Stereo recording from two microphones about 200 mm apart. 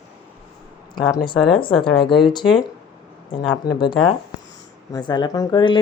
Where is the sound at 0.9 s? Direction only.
20° left (ahead or behind).